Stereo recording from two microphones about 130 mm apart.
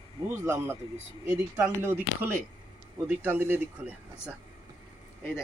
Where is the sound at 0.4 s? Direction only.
20° right (ahead or behind).